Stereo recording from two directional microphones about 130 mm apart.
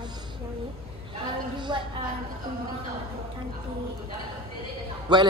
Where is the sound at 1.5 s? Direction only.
35° right (ahead or behind).